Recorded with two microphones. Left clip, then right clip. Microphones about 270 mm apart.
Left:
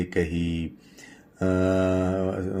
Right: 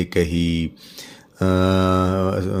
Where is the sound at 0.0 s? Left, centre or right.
Right.